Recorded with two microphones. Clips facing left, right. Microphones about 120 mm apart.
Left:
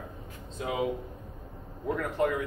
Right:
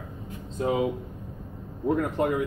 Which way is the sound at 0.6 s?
30° right (ahead or behind).